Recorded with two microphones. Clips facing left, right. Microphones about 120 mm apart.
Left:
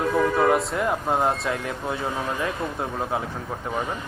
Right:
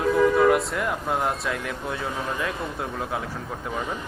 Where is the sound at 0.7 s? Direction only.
30° left (ahead or behind).